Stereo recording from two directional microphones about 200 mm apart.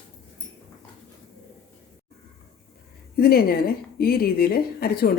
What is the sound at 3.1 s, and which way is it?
A woman's voice, 50° left (ahead or behind).